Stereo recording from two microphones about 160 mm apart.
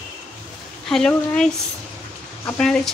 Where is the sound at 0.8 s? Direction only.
5° left (ahead or behind).